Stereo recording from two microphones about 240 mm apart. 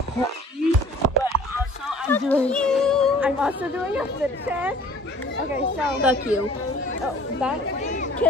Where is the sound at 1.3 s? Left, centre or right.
Right.